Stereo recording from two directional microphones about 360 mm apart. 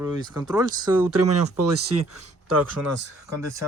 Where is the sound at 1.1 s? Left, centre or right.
Right.